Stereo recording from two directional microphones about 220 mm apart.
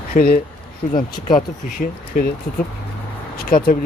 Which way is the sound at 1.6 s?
35° left (ahead or behind).